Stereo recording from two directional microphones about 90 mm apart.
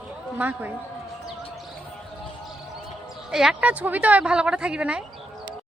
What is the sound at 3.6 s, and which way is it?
Speech, 15° right (ahead or behind).